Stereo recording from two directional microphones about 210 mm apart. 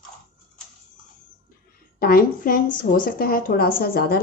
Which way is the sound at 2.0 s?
45° left (ahead or behind).